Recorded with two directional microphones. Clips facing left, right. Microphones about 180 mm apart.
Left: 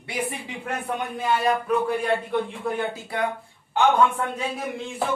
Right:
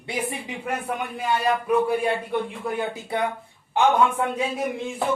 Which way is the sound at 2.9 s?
20° right (ahead or behind).